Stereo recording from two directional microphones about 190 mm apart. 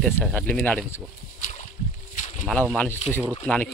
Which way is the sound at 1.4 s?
40° left (ahead or behind).